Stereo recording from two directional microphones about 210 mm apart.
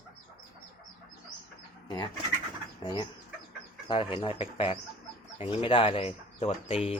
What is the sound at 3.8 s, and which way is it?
Speech, 25° left (ahead or behind).